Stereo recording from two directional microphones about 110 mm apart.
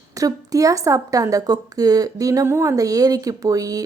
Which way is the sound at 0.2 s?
30° right (ahead or behind).